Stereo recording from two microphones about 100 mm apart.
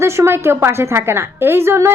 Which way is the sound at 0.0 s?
25° right (ahead or behind).